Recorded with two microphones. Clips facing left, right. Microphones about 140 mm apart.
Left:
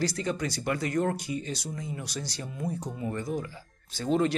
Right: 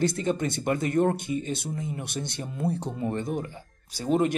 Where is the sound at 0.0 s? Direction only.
25° right (ahead or behind).